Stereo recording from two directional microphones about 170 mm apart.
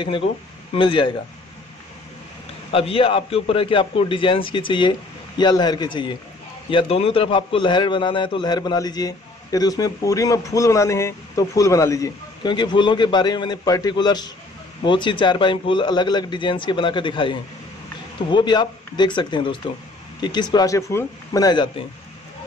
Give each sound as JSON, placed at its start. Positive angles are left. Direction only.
{"t": 0.7, "sound": "a man's voice", "side_deg": 30}
{"t": 2.7, "sound": "a man's voice", "side_deg": 35}